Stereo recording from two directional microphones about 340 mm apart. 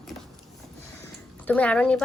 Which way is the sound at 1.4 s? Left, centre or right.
Centre.